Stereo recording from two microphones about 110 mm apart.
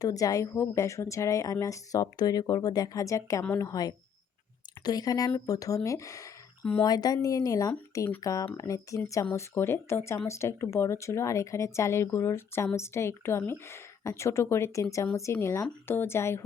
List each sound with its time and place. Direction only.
0.0 s speech: 30° left (ahead or behind)